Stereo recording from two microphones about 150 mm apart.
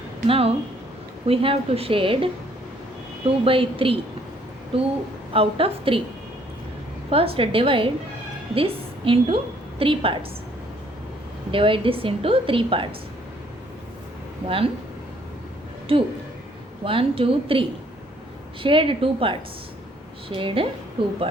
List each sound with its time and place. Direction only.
0.3 s a woman's voice: 40° right (ahead or behind)
7.1 s a woman's voice: 40° right (ahead or behind)
11.5 s a woman's voice: 35° right (ahead or behind)
14.4 s a woman's voice: 40° right (ahead or behind)
15.9 s a woman's voice: 40° right (ahead or behind)